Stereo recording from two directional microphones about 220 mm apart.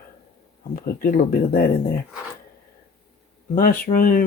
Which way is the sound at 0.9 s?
40° left (ahead or behind).